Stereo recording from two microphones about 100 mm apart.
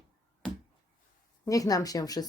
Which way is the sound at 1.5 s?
35° left (ahead or behind).